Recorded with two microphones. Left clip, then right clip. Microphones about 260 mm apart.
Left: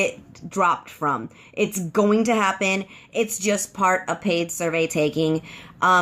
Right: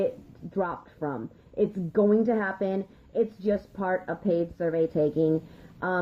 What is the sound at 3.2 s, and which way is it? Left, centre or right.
Speech, left.